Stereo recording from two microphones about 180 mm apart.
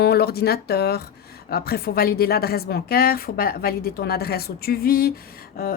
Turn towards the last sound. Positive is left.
turn(degrees=55)  # may be behind; listen again after turning